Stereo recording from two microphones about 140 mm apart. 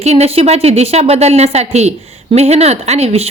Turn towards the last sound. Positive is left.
turn(degrees=-45)  # may be behind; listen again after turning